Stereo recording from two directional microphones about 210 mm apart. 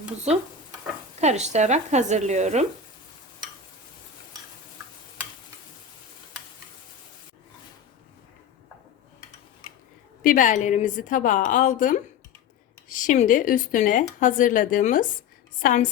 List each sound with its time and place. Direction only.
1.2 s speech: 30° right (ahead or behind)
10.2 s speech: 35° left (ahead or behind)